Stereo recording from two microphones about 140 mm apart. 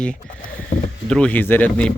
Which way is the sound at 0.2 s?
75° left (ahead or behind).